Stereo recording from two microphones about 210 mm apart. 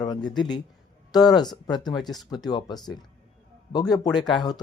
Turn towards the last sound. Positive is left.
turn(degrees=20)  # may be behind; listen again after turning